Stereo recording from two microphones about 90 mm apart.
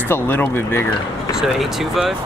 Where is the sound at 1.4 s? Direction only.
5° right (ahead or behind).